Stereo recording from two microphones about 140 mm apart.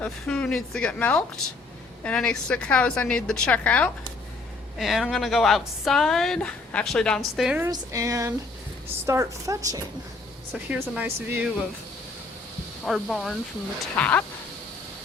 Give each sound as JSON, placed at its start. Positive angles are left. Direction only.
{"t": 0.0, "sound": "a woman's voice", "side_deg": 5}
{"t": 4.8, "sound": "a woman's voice", "side_deg": 0}
{"t": 7.6, "sound": "a woman's voice", "side_deg": -25}
{"t": 10.5, "sound": "speech", "side_deg": -10}
{"t": 12.8, "sound": "a woman's voice", "side_deg": 0}
{"t": 13.9, "sound": "a woman's voice", "side_deg": 10}